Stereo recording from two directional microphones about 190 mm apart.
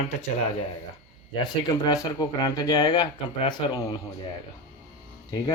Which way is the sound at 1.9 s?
20° left (ahead or behind).